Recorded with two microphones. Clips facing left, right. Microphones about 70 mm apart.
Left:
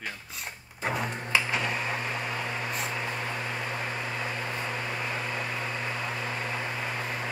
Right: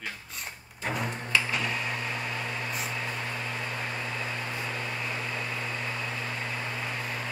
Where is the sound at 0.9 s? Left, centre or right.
Left.